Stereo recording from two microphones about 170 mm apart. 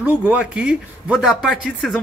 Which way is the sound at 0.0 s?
10° right (ahead or behind).